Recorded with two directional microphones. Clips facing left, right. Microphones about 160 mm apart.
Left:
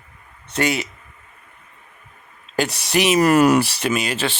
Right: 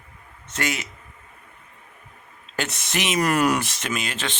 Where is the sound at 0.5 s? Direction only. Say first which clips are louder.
Left 7 dB; 30° left (ahead or behind).